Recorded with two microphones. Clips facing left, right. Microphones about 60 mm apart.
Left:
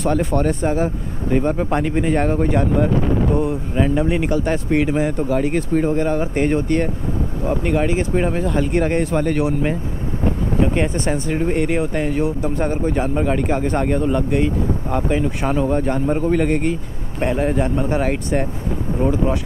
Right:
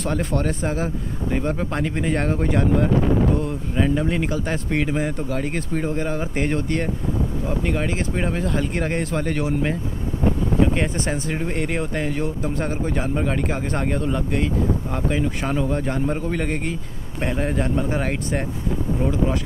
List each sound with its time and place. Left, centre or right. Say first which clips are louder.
0.0 s speech: left 5 dB; centre
1.4 s speech: left 5 dB; centre
10.9 s speech: left 4 dB; centre
19.0 s speech: left 6 dB; centre